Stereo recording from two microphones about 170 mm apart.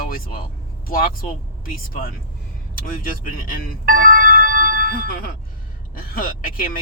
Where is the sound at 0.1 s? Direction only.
55° left (ahead or behind).